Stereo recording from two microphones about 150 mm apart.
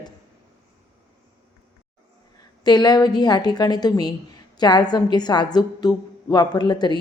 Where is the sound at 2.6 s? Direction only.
25° left (ahead or behind).